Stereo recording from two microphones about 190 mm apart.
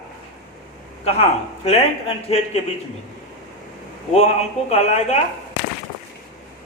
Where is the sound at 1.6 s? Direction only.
35° left (ahead or behind).